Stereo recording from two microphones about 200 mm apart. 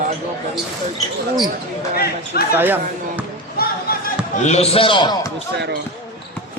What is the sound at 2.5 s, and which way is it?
Speech, 10° right (ahead or behind).